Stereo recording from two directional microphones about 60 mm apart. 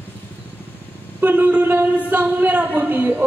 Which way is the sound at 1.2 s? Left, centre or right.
Right.